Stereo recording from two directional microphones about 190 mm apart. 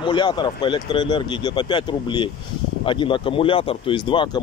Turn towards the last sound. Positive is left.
turn(degrees=25)  # may be behind; listen again after turning